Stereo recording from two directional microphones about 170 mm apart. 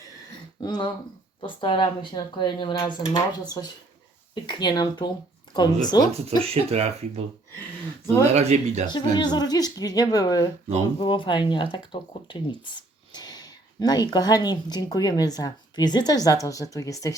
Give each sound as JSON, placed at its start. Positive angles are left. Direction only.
{"t": 0.6, "sound": "speech", "side_deg": 25}
{"t": 6.1, "sound": "speech", "side_deg": -35}
{"t": 8.0, "sound": "speech", "side_deg": 15}
{"t": 8.3, "sound": "speech", "side_deg": -40}
{"t": 8.9, "sound": "speech", "side_deg": 25}